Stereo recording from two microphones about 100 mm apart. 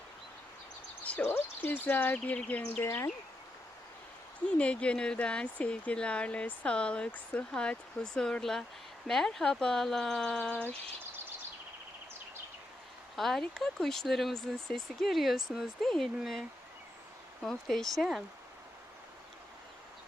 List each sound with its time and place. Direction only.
1.0 s speech: 15° left (ahead or behind)
2.8 s speech: 25° left (ahead or behind)
4.5 s speech: 10° left (ahead or behind)
13.1 s speech: 5° left (ahead or behind)
17.4 s speech: 5° left (ahead or behind)